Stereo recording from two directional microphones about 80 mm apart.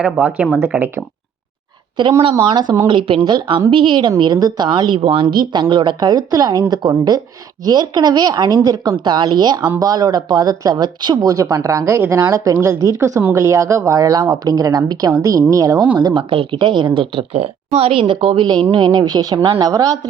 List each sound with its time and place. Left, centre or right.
0.0 s speech: centre
2.0 s a woman's voice: right
3.7 s a woman's voice: right
4.2 s speech: right
9.0 s a woman's voice: right
12.8 s a woman's voice: right
16.0 s a woman's voice: right
18.7 s speech: right